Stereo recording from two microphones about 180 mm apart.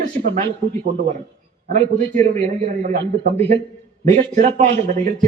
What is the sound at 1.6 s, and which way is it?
A man's voice, 40° right (ahead or behind).